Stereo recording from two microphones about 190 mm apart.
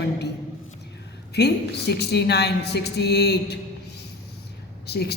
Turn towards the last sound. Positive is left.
turn(degrees=60)  # may be behind; listen again after turning